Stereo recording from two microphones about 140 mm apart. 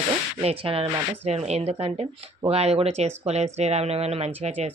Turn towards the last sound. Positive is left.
turn(degrees=-45)  # may be behind; listen again after turning